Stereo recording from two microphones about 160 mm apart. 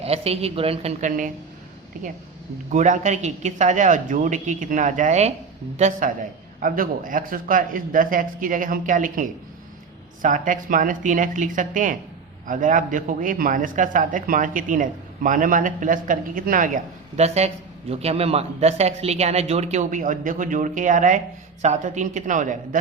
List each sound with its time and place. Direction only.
0.0 s speech: 40° right (ahead or behind)
2.7 s a man's voice: 50° right (ahead or behind)
6.6 s speech: 60° right (ahead or behind)
17.2 s a man's voice: 40° right (ahead or behind)